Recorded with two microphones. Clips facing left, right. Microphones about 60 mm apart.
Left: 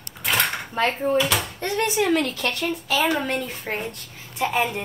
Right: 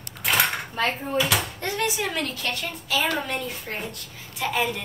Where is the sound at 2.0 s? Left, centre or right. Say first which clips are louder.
Left 7 dB; left.